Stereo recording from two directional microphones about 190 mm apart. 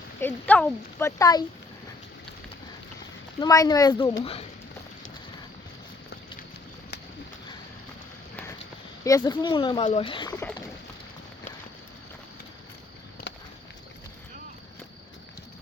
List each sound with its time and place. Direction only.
0.2 s speech: 10° left (ahead or behind)
3.4 s speech: 20° left (ahead or behind)
9.0 s speech: 20° left (ahead or behind)